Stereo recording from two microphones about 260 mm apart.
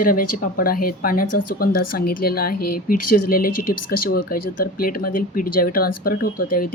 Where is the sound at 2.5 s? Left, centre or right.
Left.